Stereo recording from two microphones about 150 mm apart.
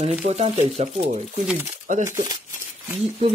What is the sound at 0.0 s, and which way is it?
Speech, 45° right (ahead or behind).